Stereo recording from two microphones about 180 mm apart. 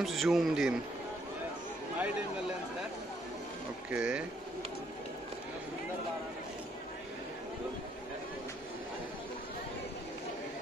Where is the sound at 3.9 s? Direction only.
5° right (ahead or behind).